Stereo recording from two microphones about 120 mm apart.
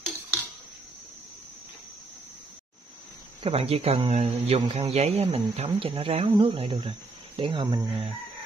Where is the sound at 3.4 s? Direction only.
55° right (ahead or behind); by 7.9 s 35° right (ahead or behind).